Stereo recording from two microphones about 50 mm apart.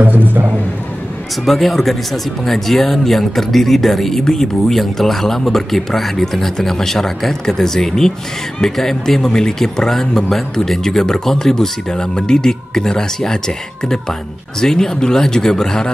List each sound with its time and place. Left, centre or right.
0.0 s speech: right
1.4 s speech: centre